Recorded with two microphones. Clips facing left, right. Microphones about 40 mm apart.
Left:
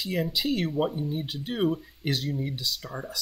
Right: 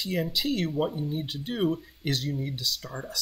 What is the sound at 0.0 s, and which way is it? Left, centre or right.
Speech, centre.